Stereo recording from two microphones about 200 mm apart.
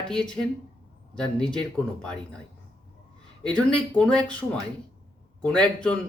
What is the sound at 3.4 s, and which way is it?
Speech, 5° left (ahead or behind).